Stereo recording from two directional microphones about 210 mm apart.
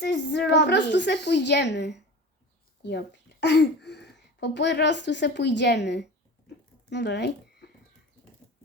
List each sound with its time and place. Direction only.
0.0 s speech: 55° left (ahead or behind)